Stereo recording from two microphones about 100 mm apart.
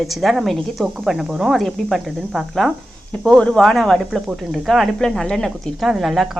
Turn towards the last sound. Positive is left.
turn(degrees=0)  # may be behind; listen again after turning